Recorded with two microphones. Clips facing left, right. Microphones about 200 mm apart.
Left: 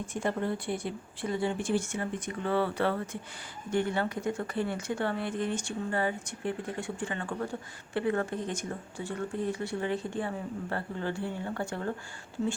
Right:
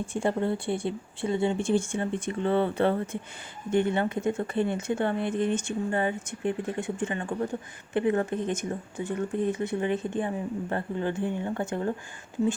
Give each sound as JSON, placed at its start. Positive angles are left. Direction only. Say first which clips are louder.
{"t": 0.0, "sound": "speech", "louder": "right 4 dB", "side_deg": -30}